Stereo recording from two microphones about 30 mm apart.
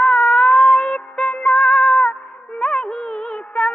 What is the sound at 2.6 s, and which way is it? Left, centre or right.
Music of bollywood, left.